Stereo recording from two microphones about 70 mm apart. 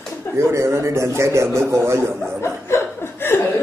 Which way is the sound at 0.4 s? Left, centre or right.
Right.